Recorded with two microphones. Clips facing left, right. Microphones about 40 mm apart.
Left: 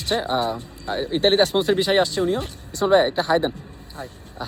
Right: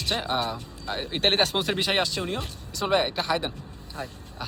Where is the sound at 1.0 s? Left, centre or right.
Right.